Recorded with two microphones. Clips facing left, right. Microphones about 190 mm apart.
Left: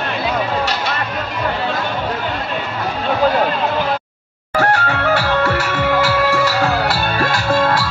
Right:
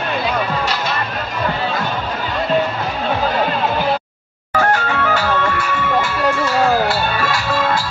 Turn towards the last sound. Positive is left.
turn(degrees=50)  # may be behind; listen again after turning